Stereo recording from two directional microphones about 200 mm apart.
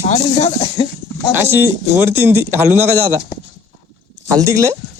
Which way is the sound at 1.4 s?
10° right (ahead or behind).